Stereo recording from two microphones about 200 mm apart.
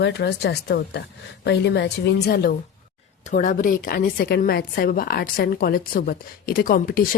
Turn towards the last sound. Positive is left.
turn(degrees=45)  # may be behind; listen again after turning